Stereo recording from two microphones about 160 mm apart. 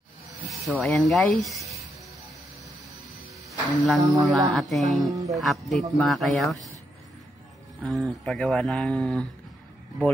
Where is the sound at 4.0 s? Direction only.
20° right (ahead or behind).